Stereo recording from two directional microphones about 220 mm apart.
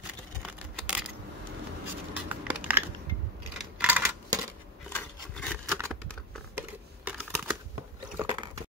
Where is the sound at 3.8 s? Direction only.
10° right (ahead or behind).